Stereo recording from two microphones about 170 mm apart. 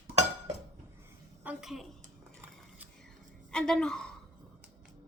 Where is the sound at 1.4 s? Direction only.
5° right (ahead or behind).